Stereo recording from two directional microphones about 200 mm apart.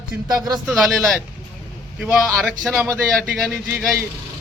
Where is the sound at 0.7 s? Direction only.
Centre (ahead or behind).